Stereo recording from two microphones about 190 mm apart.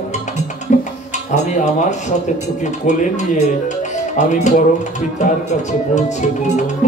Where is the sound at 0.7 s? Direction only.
40° left (ahead or behind).